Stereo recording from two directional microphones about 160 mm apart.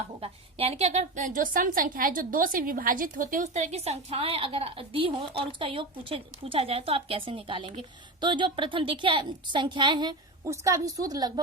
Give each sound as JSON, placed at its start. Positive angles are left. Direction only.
{"t": 0.2, "sound": "a woman's voice", "side_deg": -40}